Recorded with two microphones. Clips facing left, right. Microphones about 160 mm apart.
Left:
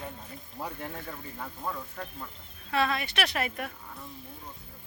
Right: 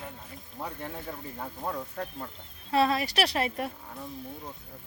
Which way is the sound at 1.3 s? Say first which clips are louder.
Right 2 dB; 35° right (ahead or behind).